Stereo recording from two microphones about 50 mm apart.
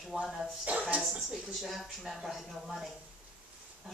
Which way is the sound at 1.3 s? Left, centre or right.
Centre.